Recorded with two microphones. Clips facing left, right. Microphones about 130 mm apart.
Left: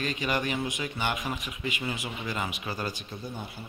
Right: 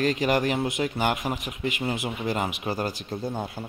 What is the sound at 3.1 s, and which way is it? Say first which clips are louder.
Speech: right 8 dB; 40° right (ahead or behind).